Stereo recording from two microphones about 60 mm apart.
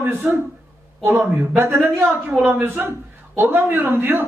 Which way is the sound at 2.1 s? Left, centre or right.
Right.